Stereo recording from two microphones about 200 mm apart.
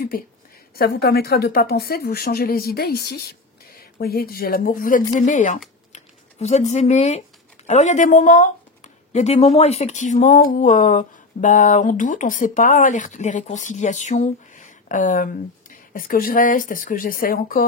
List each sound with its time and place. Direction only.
0.7 s a woman's voice: 55° left (ahead or behind)